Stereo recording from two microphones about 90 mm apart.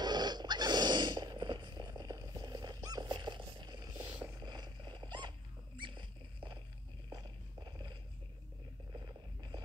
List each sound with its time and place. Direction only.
0.0 s dog: 50° right (ahead or behind)
3.1 s a sound: 60° right (ahead or behind)
4.4 s purr: 55° right (ahead or behind)
5.8 s rodents: 65° right (ahead or behind)
7.1 s walk: 50° right (ahead or behind)
9.0 s a sound: 55° right (ahead or behind)